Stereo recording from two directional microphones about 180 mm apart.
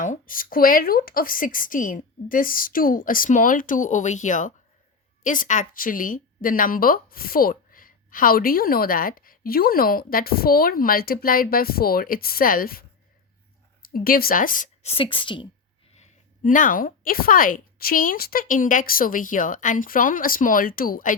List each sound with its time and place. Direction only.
0.0 s speech: 50° left (ahead or behind)
13.8 s speech: 55° left (ahead or behind); by 15.4 s 25° left (ahead or behind)
16.0 s speech: 45° left (ahead or behind)